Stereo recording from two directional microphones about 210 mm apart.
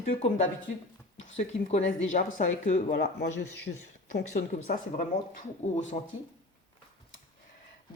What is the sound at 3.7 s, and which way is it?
Speech, 45° left (ahead or behind).